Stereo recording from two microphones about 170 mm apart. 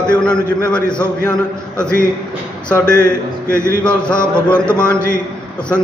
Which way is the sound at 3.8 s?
5° left (ahead or behind).